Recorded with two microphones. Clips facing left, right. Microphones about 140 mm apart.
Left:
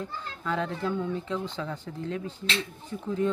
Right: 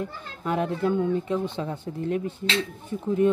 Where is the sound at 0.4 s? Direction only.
20° right (ahead or behind).